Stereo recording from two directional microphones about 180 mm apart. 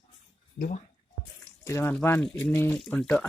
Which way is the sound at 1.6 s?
10° left (ahead or behind).